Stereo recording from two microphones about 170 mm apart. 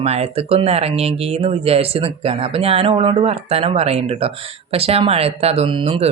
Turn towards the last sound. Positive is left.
turn(degrees=-35)  # may be behind; listen again after turning